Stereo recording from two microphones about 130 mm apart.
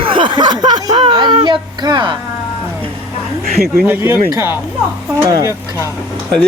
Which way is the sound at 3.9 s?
15° right (ahead or behind).